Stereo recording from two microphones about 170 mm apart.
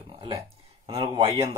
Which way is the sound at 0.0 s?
30° right (ahead or behind).